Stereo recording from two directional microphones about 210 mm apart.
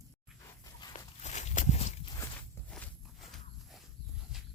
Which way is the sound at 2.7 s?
5° left (ahead or behind).